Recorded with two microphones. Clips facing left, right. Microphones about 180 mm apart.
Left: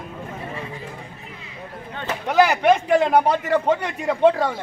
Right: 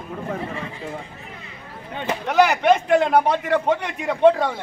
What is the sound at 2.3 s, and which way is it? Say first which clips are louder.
A man's voice: even; 5° left (ahead or behind).